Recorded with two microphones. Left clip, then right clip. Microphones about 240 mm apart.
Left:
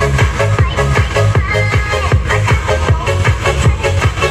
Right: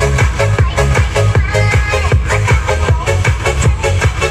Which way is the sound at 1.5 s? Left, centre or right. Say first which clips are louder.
Right 2 dB; right.